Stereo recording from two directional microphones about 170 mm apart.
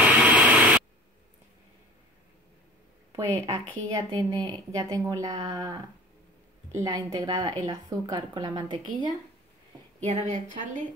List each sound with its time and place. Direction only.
0.0 s white noise: 10° right (ahead or behind)
3.1 s a woman's voice: 20° right (ahead or behind)
9.9 s speech: 40° right (ahead or behind)